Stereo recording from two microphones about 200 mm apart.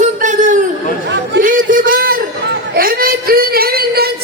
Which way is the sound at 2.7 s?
45° right (ahead or behind).